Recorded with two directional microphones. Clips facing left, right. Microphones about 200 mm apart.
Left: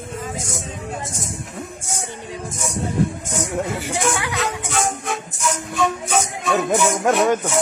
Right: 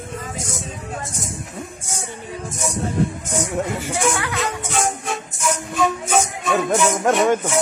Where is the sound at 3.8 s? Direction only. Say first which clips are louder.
Right 1 dB; 10° left (ahead or behind).